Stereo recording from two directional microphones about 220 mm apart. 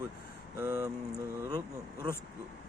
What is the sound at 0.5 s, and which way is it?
Speech, 10° right (ahead or behind).